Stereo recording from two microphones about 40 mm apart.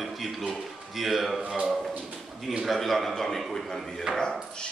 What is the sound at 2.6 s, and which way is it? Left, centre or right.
A man's voice, centre.